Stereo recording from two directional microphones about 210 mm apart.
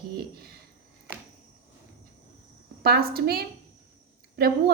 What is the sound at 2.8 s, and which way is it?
Speech, 45° right (ahead or behind).